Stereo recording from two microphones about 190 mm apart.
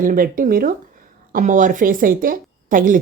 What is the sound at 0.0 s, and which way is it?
A woman's voice, 45° right (ahead or behind).